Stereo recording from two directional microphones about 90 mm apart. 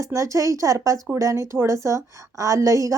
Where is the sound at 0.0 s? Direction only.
35° right (ahead or behind).